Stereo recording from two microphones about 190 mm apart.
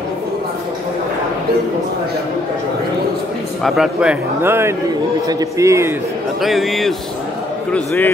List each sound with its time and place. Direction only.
3.6 s a man's voice: centre (ahead or behind)
6.4 s a man's voice: centre (ahead or behind)
7.7 s a man's voice: 10° left (ahead or behind)